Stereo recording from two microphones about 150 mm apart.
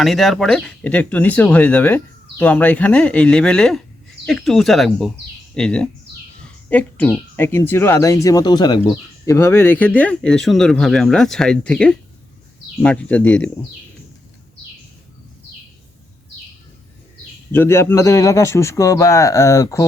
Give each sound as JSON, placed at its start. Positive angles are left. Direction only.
{"t": 0.0, "sound": "speech", "side_deg": 0}
{"t": 17.5, "sound": "speech", "side_deg": 15}